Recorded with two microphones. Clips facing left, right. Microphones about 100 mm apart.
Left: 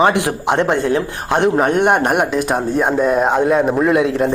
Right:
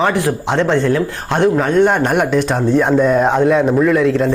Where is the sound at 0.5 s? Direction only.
15° left (ahead or behind).